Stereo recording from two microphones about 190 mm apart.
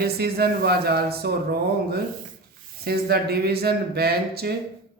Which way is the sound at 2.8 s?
55° right (ahead or behind).